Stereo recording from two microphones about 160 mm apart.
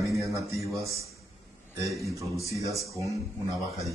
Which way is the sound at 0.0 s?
20° right (ahead or behind).